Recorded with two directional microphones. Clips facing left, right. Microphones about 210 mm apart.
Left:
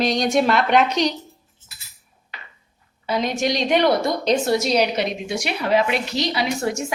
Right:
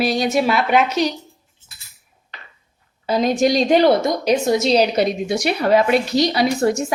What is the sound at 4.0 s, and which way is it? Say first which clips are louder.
A woman's voice: right 2 dB; 15° right (ahead or behind).